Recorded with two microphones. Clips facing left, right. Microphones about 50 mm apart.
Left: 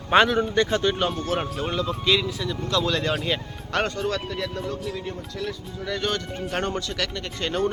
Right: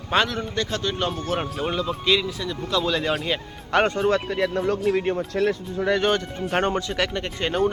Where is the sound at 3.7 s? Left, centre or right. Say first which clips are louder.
Right 5 dB; right.